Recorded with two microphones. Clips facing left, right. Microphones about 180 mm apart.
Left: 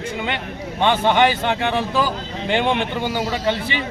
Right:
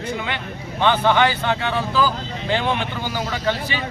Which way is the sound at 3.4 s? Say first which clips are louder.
Left 1 dB; 20° left (ahead or behind).